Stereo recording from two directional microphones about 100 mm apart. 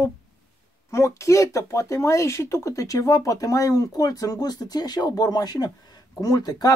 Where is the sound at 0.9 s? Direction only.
30° left (ahead or behind).